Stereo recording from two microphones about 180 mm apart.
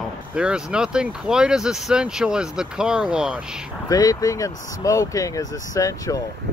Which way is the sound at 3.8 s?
20° left (ahead or behind).